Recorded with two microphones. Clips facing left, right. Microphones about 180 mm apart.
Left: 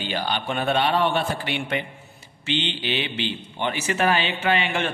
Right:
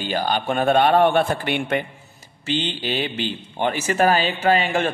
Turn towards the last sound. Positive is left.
turn(degrees=-40)  # may be behind; listen again after turning